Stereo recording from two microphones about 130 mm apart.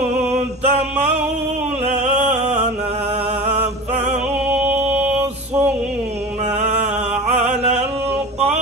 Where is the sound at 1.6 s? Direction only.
60° right (ahead or behind).